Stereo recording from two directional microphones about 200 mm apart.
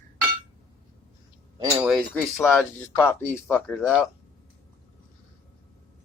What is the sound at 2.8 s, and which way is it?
Speech, 10° left (ahead or behind).